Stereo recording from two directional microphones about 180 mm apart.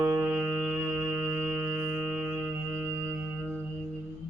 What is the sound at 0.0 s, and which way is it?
Music, 15° right (ahead or behind).